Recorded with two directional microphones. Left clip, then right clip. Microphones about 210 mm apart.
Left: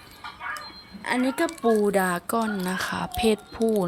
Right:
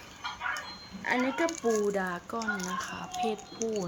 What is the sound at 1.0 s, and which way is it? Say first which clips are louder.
Speech: left 4 dB; 50° left (ahead or behind).